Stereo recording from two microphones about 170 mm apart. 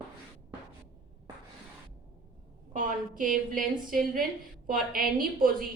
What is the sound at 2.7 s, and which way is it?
A woman's voice, 50° right (ahead or behind).